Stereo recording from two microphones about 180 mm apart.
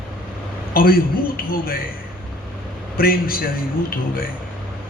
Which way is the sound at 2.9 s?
55° left (ahead or behind).